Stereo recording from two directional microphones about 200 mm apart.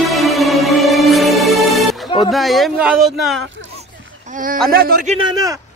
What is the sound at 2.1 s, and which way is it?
Speech, centre (ahead or behind).